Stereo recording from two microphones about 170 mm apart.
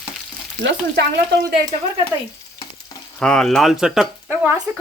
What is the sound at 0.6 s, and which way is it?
Speech, 90° right.